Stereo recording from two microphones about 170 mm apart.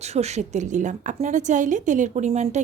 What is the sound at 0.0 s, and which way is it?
A woman's voice, 40° right (ahead or behind).